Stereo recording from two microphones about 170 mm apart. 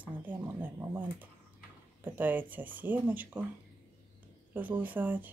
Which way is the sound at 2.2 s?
10° right (ahead or behind).